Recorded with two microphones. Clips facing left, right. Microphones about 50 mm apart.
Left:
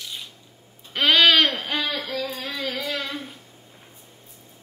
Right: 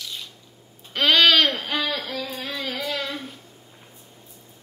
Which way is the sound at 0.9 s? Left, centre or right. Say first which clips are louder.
Even; centre.